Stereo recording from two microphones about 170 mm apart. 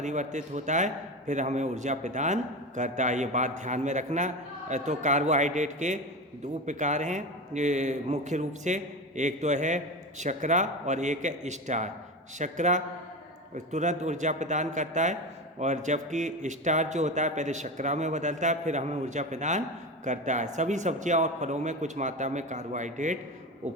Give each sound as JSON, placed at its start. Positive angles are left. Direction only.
{"t": 0.0, "sound": "a man's voice", "side_deg": -45}